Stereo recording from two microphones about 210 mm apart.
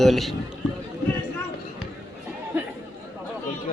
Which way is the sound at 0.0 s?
Centre (ahead or behind).